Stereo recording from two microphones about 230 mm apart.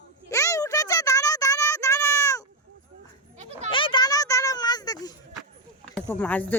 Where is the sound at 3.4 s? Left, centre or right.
Right.